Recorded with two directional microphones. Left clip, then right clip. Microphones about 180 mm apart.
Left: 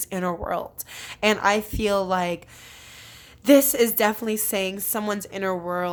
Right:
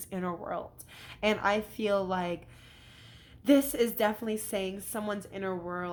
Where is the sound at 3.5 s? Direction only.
35° left (ahead or behind).